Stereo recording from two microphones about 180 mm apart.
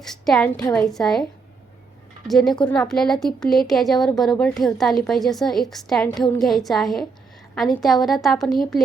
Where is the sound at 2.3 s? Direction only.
Centre (ahead or behind).